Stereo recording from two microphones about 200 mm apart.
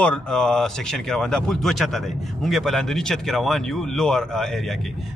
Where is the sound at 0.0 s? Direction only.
5° left (ahead or behind).